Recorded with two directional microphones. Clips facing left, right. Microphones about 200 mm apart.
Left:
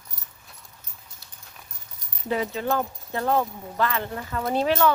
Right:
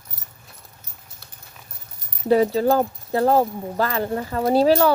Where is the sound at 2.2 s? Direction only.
40° right (ahead or behind).